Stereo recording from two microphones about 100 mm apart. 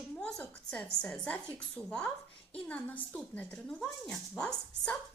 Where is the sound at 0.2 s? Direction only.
5° left (ahead or behind).